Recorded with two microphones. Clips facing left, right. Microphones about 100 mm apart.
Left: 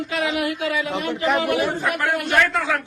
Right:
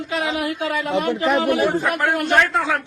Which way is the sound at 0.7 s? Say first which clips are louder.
Right 3 dB; 45° right (ahead or behind).